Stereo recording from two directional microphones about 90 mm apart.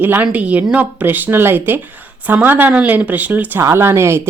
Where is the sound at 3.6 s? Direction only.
30° right (ahead or behind).